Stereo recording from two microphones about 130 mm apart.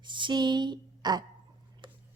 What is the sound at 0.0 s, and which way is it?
Speech, 35° right (ahead or behind).